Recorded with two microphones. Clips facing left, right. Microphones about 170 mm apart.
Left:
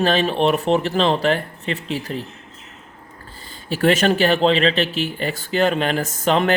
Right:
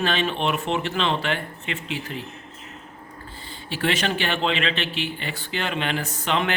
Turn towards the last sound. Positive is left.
turn(degrees=40)  # may be behind; listen again after turning